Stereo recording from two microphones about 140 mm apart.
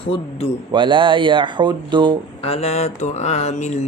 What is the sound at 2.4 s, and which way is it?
Mantra, 45° left (ahead or behind).